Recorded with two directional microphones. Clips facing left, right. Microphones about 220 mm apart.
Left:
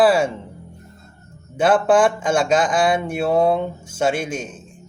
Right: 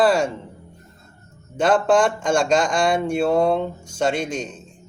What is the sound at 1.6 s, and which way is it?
Speech, 5° left (ahead or behind).